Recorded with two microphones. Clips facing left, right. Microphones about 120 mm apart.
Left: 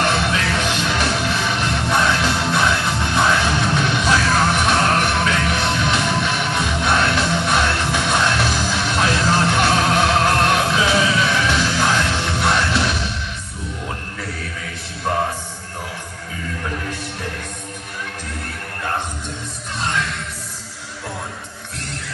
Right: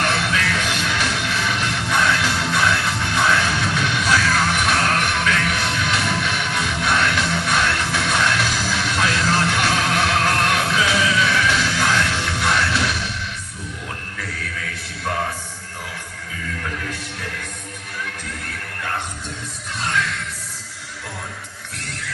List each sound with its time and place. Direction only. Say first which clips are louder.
0.0 s music: left 2 dB; 25° left (ahead or behind)
16.6 s music: left 3 dB; 25° left (ahead or behind)